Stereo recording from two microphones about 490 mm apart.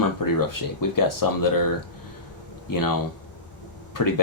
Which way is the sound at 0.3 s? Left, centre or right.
Left.